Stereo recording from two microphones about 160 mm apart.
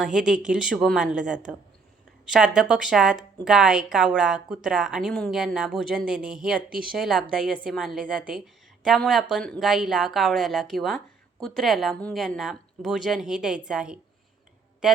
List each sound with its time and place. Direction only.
0.0 s a woman's voice: 5° right (ahead or behind)
6.7 s speech: 65° right (ahead or behind)
6.9 s speech: centre (ahead or behind)